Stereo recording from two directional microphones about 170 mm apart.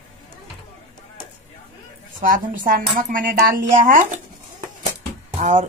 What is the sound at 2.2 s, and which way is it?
Speech, 55° right (ahead or behind).